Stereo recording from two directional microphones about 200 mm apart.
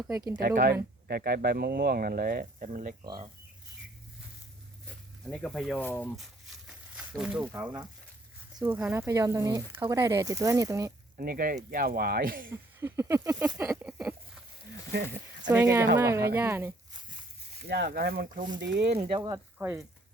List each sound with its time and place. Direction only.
0.3 s speech: 45° right (ahead or behind)
3.0 s speech: 25° right (ahead or behind)
4.9 s a sound: 5° left (ahead or behind)
7.4 s speech: 20° right (ahead or behind)
11.2 s speech: 45° right (ahead or behind)
12.8 s speech: 15° right (ahead or behind)
13.7 s a sound: 5° right (ahead or behind)
15.5 s speech: 15° right (ahead or behind)
17.7 s speech: 60° right (ahead or behind)
18.9 s speech: 30° right (ahead or behind)
19.3 s speech: 10° right (ahead or behind)